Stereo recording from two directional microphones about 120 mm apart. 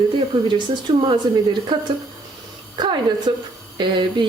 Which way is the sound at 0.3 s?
35° right (ahead or behind).